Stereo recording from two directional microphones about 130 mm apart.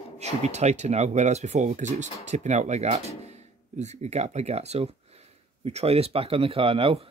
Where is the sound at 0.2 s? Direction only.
60° right (ahead or behind).